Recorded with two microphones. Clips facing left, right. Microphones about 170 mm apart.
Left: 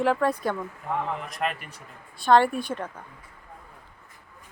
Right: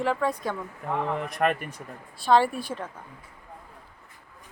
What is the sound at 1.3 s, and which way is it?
Speech, 50° right (ahead or behind).